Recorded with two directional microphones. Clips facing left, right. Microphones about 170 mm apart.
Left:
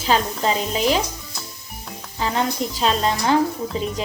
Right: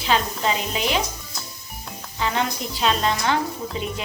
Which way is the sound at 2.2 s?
35° left (ahead or behind).